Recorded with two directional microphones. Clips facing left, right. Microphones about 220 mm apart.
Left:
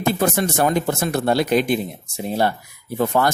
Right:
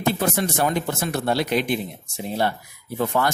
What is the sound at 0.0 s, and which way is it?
Speech, 45° left (ahead or behind).